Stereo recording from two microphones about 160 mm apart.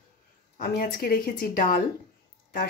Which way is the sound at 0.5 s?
70° left (ahead or behind).